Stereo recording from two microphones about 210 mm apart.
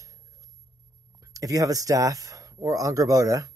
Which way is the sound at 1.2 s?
15° right (ahead or behind).